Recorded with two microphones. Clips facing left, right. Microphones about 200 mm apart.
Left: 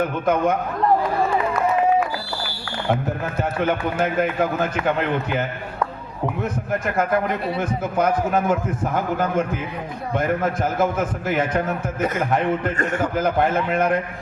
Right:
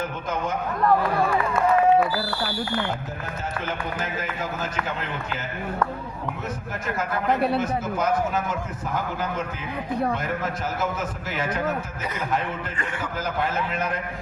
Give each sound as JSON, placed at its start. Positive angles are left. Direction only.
{"t": 0.0, "sound": "a man's voice", "side_deg": 60}
{"t": 3.6, "sound": "a man's voice", "side_deg": 60}